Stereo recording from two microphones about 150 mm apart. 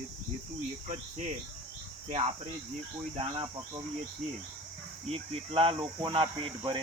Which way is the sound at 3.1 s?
35° right (ahead or behind).